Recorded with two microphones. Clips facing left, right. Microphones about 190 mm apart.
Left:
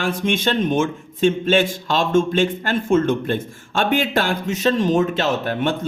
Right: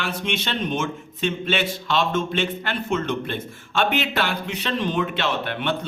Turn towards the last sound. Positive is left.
turn(degrees=45)  # may be behind; listen again after turning